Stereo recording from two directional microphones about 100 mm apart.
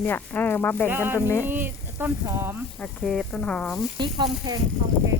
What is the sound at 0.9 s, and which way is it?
Speech, 20° right (ahead or behind).